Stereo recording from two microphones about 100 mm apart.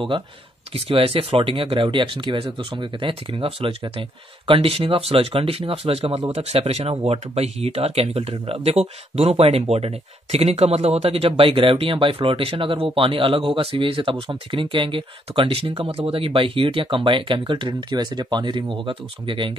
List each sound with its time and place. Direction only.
0.7 s speech: 65° right (ahead or behind)